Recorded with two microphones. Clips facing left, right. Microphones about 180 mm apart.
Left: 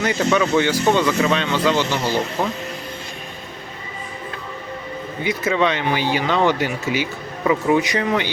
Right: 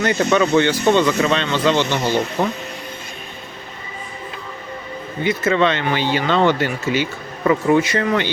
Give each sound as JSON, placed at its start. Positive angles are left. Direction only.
{"t": 0.0, "sound": "speech", "side_deg": 10}
{"t": 5.2, "sound": "speech", "side_deg": 15}